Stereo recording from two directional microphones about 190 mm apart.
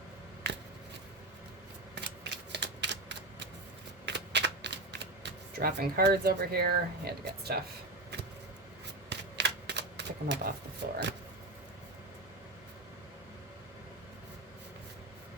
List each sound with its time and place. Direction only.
2.0 s typewriter: 65° right (ahead or behind)
4.0 s shuffling cards: 65° right (ahead or behind)
9.0 s a sound: 65° right (ahead or behind)
10.8 s vehicle: 60° right (ahead or behind)